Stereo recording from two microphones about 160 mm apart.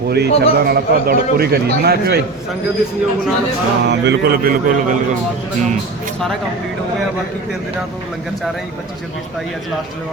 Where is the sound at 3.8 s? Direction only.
90° right; by 4.9 s 60° right (ahead or behind).